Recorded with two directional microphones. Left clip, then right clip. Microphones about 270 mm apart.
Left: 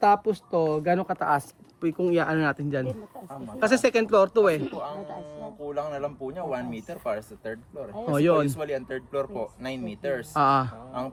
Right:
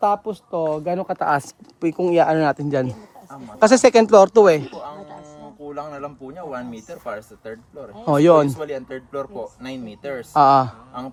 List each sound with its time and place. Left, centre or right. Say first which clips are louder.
0.0 s speech: right 1 dB; centre
5.6 s speech: even; centre
8.0 s speech: right 9 dB; right
8.5 s a man's voice: right 2 dB; centre
10.3 s speech: right 9 dB; centre